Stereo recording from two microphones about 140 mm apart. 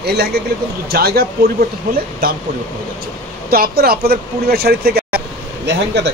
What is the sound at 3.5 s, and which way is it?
Speech, 90° right.